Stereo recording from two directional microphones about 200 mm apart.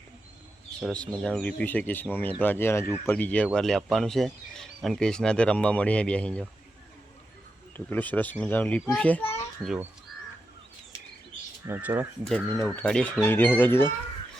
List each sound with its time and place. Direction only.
0.8 s speech: 5° left (ahead or behind)
7.9 s speech: 10° left (ahead or behind)
9.2 s children playing: 30° left (ahead or behind)
11.6 s speech: 10° right (ahead or behind)
12.2 s speech: centre (ahead or behind)